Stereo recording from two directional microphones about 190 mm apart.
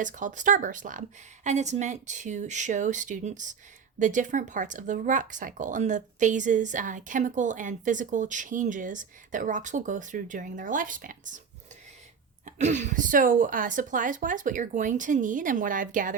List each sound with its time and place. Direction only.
0.0 s a woman's voice: 40° right (ahead or behind)
12.5 s a woman's voice: 40° right (ahead or behind)